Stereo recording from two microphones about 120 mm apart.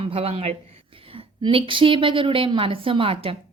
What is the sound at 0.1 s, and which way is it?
A woman's voice, 55° right (ahead or behind).